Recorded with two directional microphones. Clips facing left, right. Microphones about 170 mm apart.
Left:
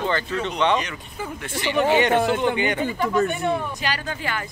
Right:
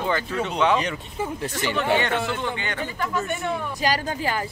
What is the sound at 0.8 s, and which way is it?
Speech, 30° right (ahead or behind).